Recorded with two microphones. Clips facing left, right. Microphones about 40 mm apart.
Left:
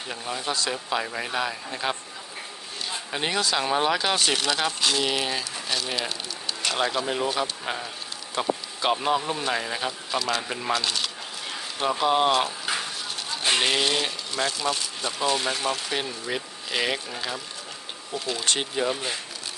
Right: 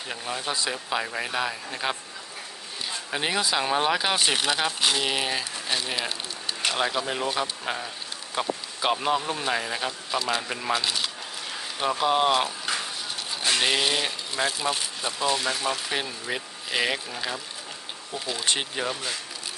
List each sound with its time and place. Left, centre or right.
0.1 s speech: centre
3.1 s speech: centre
10.2 s a sound: centre
13.6 s speech: centre
15.2 s speech: centre